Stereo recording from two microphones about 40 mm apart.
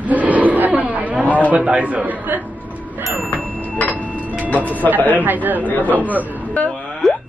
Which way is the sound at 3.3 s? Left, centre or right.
Left.